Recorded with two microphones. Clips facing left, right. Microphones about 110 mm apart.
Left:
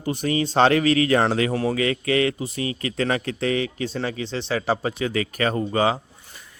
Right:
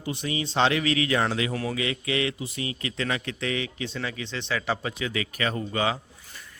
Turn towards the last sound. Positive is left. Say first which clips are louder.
# left 6 dB
turn(degrees=35)  # may be behind; listen again after turning